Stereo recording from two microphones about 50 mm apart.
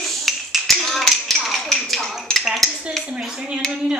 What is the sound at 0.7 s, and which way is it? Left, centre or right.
Clapping, centre.